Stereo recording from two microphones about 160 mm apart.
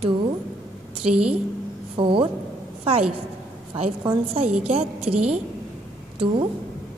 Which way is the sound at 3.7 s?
35° right (ahead or behind).